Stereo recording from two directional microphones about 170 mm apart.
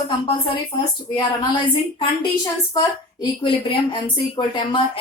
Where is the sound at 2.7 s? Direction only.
25° left (ahead or behind).